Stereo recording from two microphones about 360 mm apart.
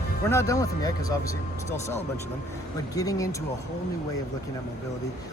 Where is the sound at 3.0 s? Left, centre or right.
Centre.